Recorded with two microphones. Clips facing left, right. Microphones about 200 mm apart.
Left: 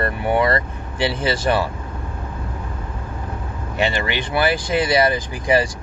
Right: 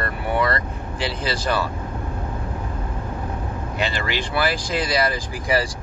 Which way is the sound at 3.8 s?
25° left (ahead or behind).